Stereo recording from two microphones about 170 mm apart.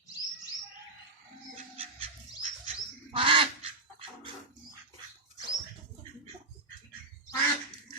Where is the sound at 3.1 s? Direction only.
30° right (ahead or behind).